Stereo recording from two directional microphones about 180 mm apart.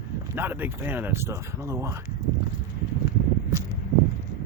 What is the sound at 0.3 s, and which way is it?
Speech, 10° right (ahead or behind).